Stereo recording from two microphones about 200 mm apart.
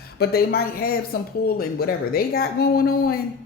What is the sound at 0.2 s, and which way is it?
Speech, 50° left (ahead or behind).